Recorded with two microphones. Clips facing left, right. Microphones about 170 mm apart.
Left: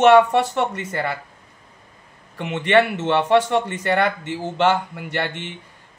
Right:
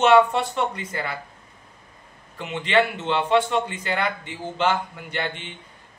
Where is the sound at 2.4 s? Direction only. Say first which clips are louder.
Left 4 dB; 65° left (ahead or behind).